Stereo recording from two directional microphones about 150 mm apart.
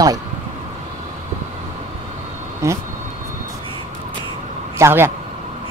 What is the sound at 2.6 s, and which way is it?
Speech, 20° right (ahead or behind).